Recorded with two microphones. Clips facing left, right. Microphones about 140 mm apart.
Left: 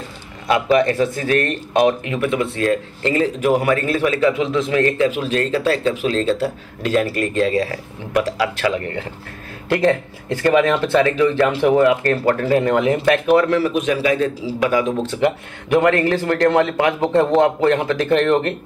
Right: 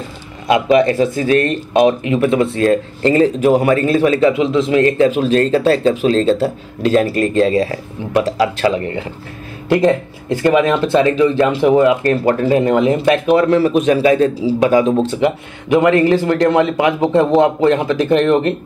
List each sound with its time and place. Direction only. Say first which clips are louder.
0.5 s speech: right 4 dB; 20° right (ahead or behind)
15.1 s speech: right 2 dB; 15° right (ahead or behind)